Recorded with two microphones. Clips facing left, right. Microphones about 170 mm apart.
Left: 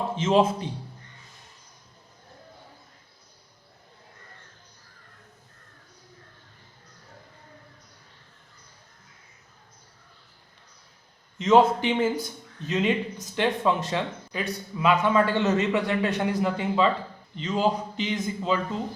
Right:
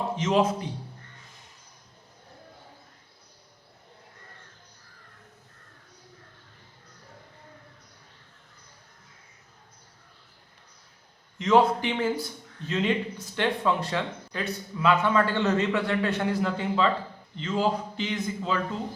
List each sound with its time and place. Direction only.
0.2 s a man's voice: 25° left (ahead or behind)
11.3 s a man's voice: 20° left (ahead or behind)